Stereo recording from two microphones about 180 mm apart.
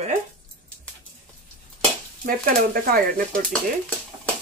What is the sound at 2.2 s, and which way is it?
Speech, 55° right (ahead or behind).